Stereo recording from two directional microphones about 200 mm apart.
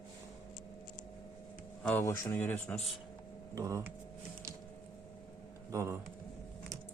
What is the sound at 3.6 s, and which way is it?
Speech, 15° right (ahead or behind).